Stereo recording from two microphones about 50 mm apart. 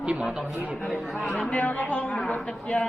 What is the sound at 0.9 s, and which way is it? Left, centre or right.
Speech, centre.